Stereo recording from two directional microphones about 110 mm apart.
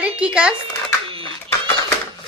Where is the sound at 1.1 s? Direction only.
55° right (ahead or behind).